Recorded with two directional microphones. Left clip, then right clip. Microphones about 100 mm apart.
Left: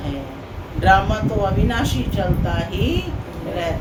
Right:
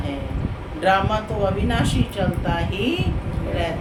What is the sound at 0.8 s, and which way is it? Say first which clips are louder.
Speech: left 3 dB; 15° right (ahead or behind).